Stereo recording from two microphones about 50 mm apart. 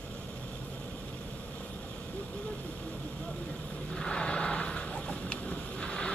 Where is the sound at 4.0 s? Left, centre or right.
Centre.